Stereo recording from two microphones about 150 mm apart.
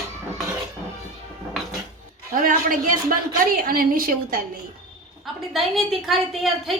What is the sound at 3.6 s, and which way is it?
Speech, 75° right (ahead or behind).